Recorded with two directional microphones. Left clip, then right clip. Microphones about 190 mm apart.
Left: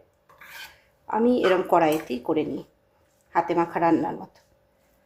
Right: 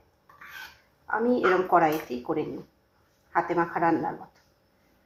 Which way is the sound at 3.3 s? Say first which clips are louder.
Left 2 dB; 45° left (ahead or behind).